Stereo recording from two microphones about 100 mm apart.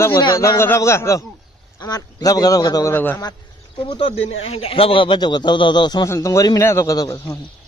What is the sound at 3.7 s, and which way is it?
Speech, 65° left (ahead or behind).